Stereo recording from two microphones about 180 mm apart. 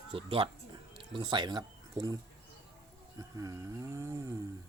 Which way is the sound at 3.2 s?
20° right (ahead or behind).